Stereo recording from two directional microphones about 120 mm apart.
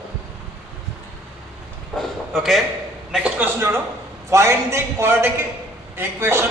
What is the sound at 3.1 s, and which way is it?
A man's voice, 10° right (ahead or behind).